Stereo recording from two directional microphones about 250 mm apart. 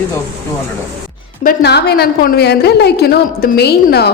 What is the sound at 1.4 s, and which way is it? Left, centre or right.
A woman's voice, left.